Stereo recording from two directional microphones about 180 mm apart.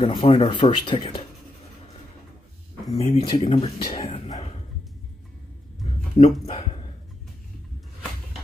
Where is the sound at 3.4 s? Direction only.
30° left (ahead or behind).